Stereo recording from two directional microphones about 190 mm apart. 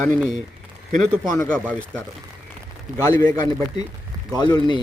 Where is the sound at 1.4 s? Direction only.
5° left (ahead or behind).